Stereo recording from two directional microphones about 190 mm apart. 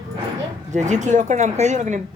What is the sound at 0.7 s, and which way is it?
Speech, 40° right (ahead or behind).